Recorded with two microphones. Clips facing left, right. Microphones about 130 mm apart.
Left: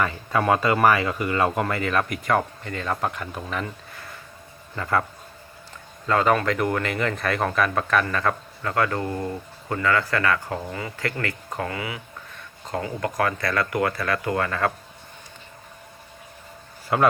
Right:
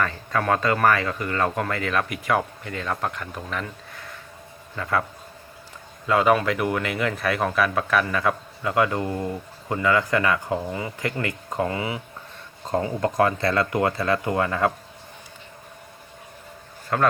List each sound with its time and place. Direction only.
0.0 s speech: 10° left (ahead or behind)
6.1 s speech: 10° right (ahead or behind)
16.9 s a man's voice: 10° left (ahead or behind)